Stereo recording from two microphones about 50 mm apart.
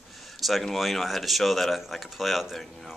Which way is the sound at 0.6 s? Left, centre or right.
Centre.